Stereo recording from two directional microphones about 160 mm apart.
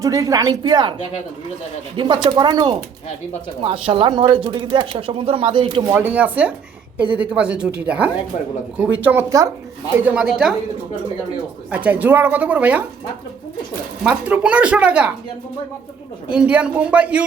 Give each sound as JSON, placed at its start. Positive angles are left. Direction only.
{"t": 0.0, "sound": "speech", "side_deg": -20}
{"t": 2.0, "sound": "speech", "side_deg": -30}
{"t": 5.9, "sound": "speech", "side_deg": -10}
{"t": 11.7, "sound": "speech", "side_deg": -10}
{"t": 14.0, "sound": "speech", "side_deg": -10}
{"t": 16.3, "sound": "speech", "side_deg": -5}